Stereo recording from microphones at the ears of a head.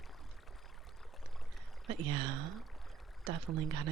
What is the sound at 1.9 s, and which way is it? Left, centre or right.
Speech, right.